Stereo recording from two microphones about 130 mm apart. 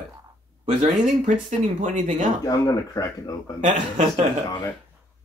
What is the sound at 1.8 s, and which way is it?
Speech, 75° right (ahead or behind).